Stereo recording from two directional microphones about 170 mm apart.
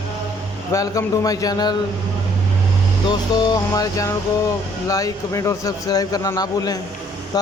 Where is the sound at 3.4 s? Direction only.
25° left (ahead or behind).